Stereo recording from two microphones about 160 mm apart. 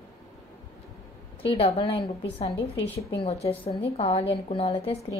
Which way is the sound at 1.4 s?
40° left (ahead or behind).